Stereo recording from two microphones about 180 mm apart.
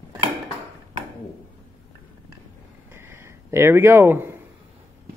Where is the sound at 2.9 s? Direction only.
15° right (ahead or behind).